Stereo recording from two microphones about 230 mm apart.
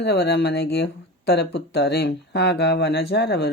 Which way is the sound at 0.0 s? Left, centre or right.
Left.